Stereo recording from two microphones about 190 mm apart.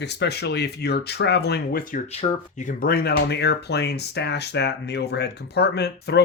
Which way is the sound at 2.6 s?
45° left (ahead or behind).